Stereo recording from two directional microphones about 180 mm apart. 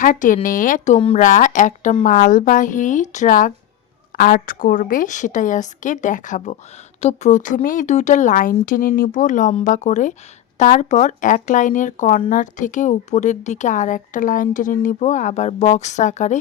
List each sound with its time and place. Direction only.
0.0 s speech: 50° left (ahead or behind)
0.9 s speech: 30° left (ahead or behind)
1.2 s speech: 45° left (ahead or behind)